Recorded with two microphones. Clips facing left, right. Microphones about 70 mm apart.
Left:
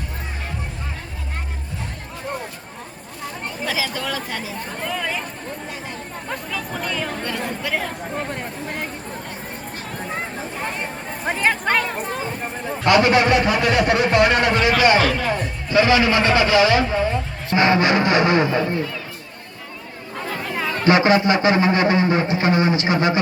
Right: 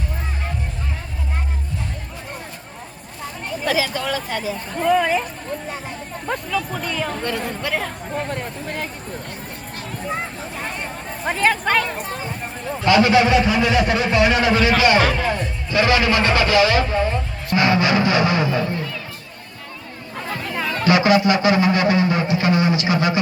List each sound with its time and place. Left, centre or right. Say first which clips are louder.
3.7 s speech: right 4 dB; centre
4.9 s speech: right 10 dB; right
6.3 s speech: right 4 dB; centre
8.3 s speech: right 1 dB; centre
11.3 s speech: right 1 dB; centre
13.1 s a man's voice: right 1 dB; left
14.8 s speech: left 2 dB; left
15.0 s speech: right 1 dB; right
15.7 s speech: left 1 dB; centre
17.5 s a man's voice: left 1 dB; left
20.4 s chatter: even; centre
20.8 s a man's voice: even; left